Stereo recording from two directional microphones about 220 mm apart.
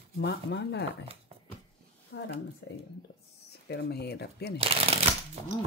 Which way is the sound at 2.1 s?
50° left (ahead or behind).